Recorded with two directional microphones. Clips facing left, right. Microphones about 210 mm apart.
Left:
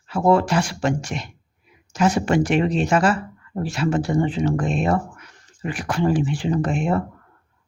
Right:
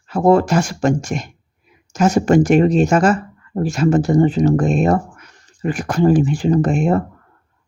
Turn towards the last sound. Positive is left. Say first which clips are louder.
# right 6 dB
turn(degrees=-45)  # may be behind; listen again after turning